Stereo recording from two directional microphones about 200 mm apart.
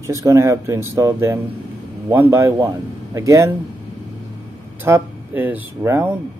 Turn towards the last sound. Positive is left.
turn(degrees=-10)  # may be behind; listen again after turning